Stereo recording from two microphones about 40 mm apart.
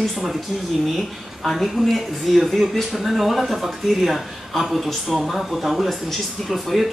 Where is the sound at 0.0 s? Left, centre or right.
Centre.